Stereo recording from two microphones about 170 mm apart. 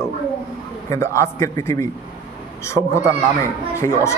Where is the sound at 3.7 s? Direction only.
15° left (ahead or behind).